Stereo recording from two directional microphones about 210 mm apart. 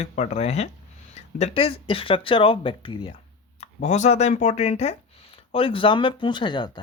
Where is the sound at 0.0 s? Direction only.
35° left (ahead or behind).